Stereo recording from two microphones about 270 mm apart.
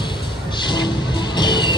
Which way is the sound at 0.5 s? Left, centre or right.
Centre.